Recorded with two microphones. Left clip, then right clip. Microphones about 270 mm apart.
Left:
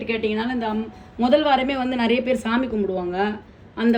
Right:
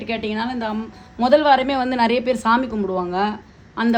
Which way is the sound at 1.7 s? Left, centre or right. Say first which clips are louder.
Right 3 dB; right.